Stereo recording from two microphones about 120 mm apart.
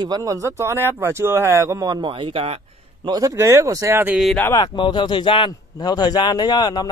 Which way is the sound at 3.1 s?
25° right (ahead or behind).